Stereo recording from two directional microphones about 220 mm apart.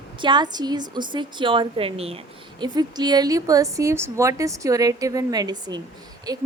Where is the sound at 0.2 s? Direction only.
20° right (ahead or behind).